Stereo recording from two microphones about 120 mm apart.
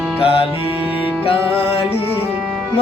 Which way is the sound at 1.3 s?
55° left (ahead or behind).